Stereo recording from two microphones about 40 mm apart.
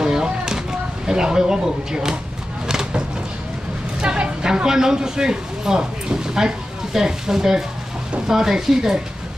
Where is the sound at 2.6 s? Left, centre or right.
Centre.